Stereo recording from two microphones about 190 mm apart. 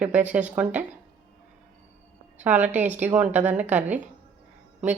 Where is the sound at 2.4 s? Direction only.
10° right (ahead or behind).